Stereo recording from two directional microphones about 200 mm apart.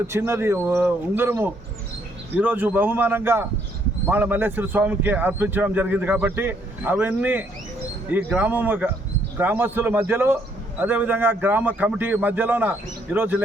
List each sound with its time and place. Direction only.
0.1 s speech: 10° right (ahead or behind)